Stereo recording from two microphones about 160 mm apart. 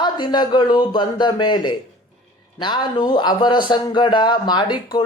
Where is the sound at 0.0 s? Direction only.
30° left (ahead or behind).